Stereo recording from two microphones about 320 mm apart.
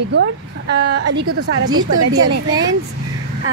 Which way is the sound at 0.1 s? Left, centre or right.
Right.